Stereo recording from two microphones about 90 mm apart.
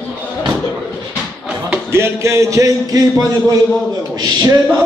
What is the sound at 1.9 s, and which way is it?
A man's voice, 30° right (ahead or behind).